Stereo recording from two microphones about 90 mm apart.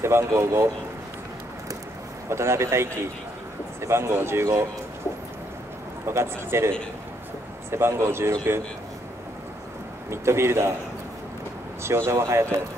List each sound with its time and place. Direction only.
0.0 s speech: 30° right (ahead or behind)
2.2 s speech: 30° right (ahead or behind)
6.0 s speech: 30° right (ahead or behind)
7.7 s speech: 30° right (ahead or behind)
10.0 s speech: 30° right (ahead or behind)
11.8 s speech: 30° right (ahead or behind)